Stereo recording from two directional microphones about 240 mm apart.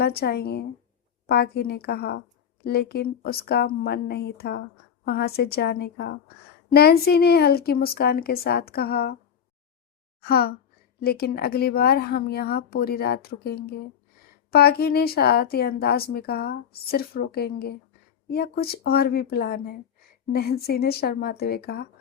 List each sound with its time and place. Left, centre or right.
0.0 s speech: left
10.2 s speech: left